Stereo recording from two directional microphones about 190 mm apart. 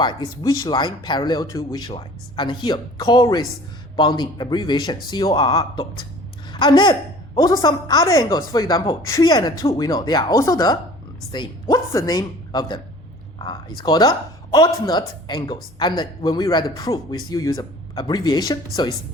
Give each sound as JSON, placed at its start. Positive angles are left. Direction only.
{"t": 0.4, "sound": "a woman's voice", "side_deg": 20}